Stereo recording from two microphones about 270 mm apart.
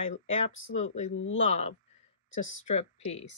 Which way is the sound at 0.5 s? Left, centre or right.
Left.